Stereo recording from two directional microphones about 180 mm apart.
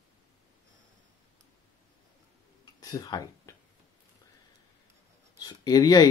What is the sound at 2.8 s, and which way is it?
Speech, 20° left (ahead or behind).